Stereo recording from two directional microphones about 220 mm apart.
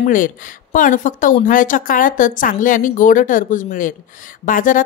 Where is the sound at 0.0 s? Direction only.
35° left (ahead or behind).